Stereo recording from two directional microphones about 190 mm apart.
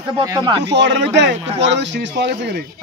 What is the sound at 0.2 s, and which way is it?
Speech, 15° right (ahead or behind).